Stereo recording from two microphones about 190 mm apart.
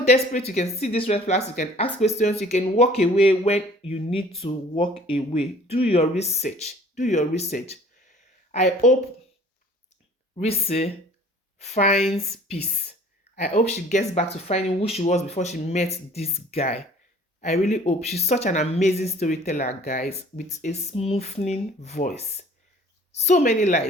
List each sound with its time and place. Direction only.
0.4 s speech: 35° left (ahead or behind)
10.3 s speech: 30° left (ahead or behind)
13.5 s a woman's voice: 35° left (ahead or behind)